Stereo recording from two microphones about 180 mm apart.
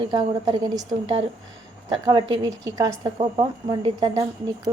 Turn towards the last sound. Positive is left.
turn(degrees=-25)  # may be behind; listen again after turning